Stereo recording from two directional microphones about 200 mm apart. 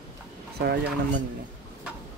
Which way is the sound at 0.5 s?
55° right (ahead or behind).